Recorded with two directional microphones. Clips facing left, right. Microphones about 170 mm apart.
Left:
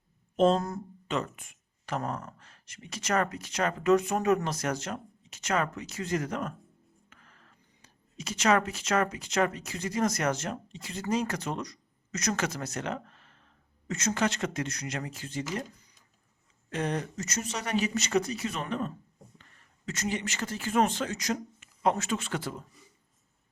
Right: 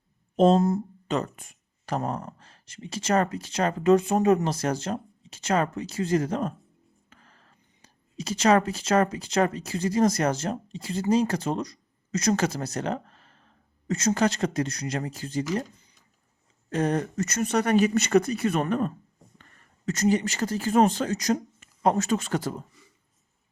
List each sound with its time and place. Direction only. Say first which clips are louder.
0.3 s speech: right 5 dB; 35° right (ahead or behind)